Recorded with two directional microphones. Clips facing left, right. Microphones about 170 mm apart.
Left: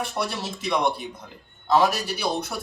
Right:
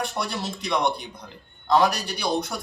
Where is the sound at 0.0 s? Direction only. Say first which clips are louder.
Even; centre (ahead or behind).